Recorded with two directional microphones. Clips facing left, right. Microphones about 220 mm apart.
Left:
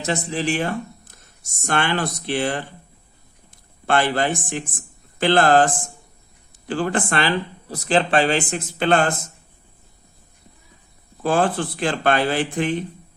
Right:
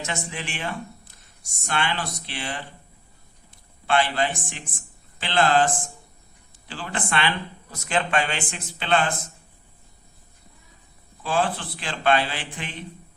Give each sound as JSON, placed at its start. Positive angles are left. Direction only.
{"t": 0.0, "sound": "speech", "side_deg": 35}
{"t": 3.8, "sound": "speech", "side_deg": 45}
{"t": 6.7, "sound": "speech", "side_deg": 50}
{"t": 11.2, "sound": "speech", "side_deg": 45}